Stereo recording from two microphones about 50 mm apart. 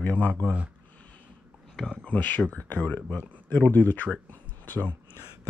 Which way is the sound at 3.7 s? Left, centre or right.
Left.